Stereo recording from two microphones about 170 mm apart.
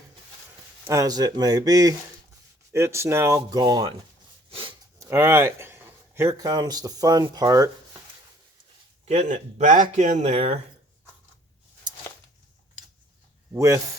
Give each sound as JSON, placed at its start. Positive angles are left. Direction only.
{"t": 0.9, "sound": "speech", "side_deg": -20}
{"t": 4.5, "sound": "a sound", "side_deg": -30}
{"t": 4.9, "sound": "speech", "side_deg": -15}
{"t": 9.0, "sound": "speech", "side_deg": -45}
{"t": 13.5, "sound": "speech", "side_deg": -20}